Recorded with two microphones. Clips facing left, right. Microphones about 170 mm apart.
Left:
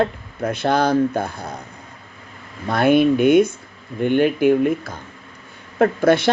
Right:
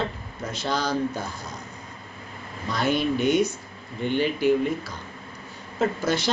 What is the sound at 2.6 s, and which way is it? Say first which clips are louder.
A man's voice: left 9 dB; 55° left (ahead or behind).